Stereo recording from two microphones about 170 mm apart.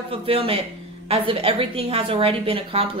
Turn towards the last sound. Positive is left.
turn(degrees=-35)  # may be behind; listen again after turning